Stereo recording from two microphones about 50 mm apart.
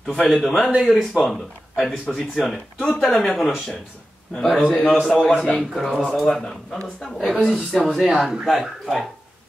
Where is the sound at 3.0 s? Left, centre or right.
Centre.